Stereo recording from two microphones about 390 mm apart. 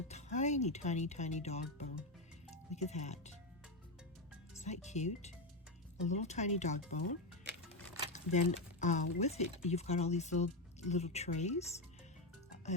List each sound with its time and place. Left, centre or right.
0.1 s speech: centre
4.6 s speech: centre
8.1 s speech: centre